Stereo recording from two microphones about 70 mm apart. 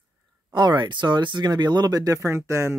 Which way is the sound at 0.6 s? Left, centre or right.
Right.